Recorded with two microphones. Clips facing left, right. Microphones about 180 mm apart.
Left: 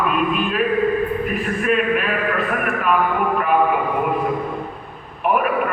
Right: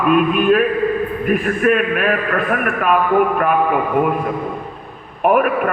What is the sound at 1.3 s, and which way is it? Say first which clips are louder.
Speech: right 8 dB; 55° right (ahead or behind).